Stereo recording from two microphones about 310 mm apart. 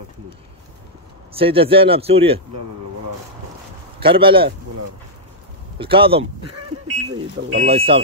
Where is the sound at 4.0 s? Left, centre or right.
Centre.